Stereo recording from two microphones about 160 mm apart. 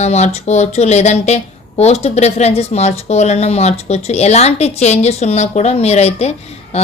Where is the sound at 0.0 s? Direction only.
45° left (ahead or behind).